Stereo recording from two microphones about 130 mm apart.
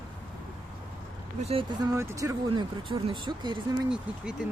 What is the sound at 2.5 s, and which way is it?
Speech, 40° right (ahead or behind).